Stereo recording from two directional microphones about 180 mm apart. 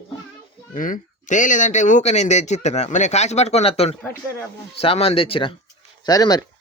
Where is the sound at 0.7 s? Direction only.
50° left (ahead or behind); by 6.4 s 20° left (ahead or behind).